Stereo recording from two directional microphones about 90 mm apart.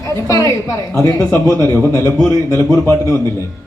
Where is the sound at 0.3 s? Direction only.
40° left (ahead or behind).